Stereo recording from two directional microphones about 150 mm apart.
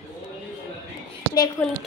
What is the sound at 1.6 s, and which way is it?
Speech, 10° left (ahead or behind).